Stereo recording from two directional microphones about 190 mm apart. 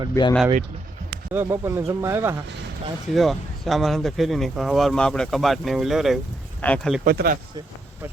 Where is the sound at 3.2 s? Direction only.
Centre (ahead or behind).